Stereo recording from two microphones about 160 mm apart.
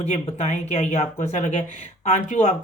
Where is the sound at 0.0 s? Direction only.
40° left (ahead or behind).